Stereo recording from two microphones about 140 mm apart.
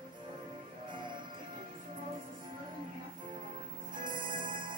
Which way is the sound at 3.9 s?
35° right (ahead or behind).